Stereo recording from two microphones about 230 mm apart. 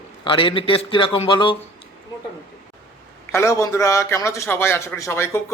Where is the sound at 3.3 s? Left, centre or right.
Centre.